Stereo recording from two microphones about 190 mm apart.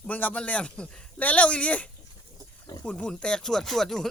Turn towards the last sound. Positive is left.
turn(degrees=0)  # may be behind; listen again after turning